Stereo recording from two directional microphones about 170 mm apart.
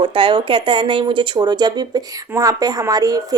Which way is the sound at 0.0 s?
30° right (ahead or behind).